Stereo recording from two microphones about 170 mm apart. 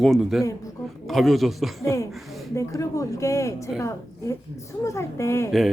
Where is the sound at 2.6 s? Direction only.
15° left (ahead or behind).